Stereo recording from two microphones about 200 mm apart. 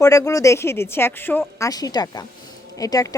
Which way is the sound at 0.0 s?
15° left (ahead or behind).